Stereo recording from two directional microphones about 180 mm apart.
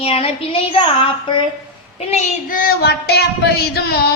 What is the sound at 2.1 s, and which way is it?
Speech, 40° left (ahead or behind).